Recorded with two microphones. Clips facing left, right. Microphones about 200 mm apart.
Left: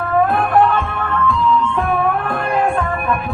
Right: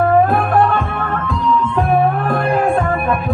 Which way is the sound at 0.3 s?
40° right (ahead or behind).